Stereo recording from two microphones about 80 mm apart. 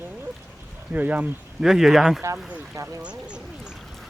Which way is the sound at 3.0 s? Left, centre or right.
Centre.